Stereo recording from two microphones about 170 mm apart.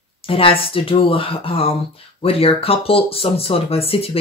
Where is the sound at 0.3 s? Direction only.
30° left (ahead or behind).